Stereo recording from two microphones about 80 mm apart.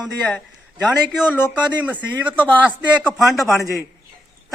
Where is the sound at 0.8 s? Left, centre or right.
Centre.